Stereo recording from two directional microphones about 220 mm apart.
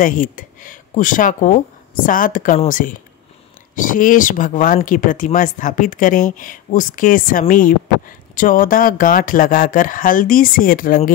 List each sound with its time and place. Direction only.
0.0 s speech: 40° left (ahead or behind)